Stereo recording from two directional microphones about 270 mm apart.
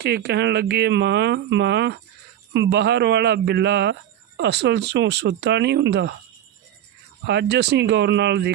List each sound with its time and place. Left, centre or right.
0.0 s speech: right
7.3 s speech: right